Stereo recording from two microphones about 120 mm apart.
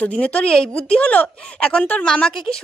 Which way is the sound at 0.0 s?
10° left (ahead or behind).